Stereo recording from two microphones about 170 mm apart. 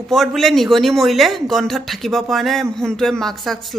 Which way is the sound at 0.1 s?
Centre (ahead or behind).